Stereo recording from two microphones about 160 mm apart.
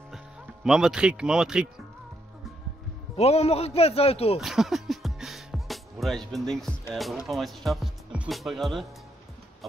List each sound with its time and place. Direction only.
0.7 s speech: 5° right (ahead or behind)
3.2 s a man's voice: 40° left (ahead or behind)
4.4 s music: centre (ahead or behind)
6.9 s speech: centre (ahead or behind)